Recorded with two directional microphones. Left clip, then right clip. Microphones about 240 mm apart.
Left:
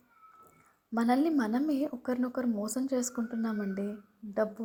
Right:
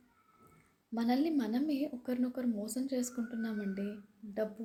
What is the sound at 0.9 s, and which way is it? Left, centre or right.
A woman's voice, centre.